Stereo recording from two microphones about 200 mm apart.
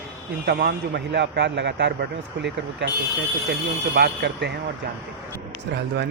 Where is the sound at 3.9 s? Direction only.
55° right (ahead or behind).